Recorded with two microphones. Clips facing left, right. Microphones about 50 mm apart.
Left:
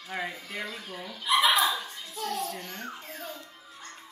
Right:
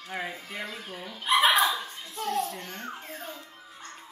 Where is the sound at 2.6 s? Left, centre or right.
Right.